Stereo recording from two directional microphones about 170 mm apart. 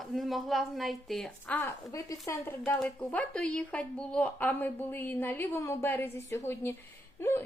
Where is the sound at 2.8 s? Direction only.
5° left (ahead or behind).